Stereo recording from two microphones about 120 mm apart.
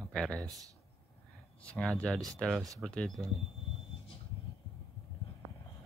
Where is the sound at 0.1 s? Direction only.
5° left (ahead or behind).